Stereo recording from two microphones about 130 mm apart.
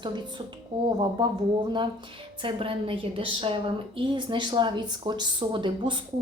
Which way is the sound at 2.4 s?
40° right (ahead or behind).